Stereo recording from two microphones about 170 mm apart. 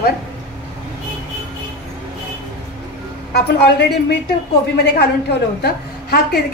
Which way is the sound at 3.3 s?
75° left (ahead or behind).